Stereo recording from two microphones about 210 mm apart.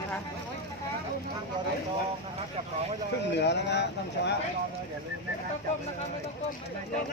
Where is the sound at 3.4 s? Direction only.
55° left (ahead or behind).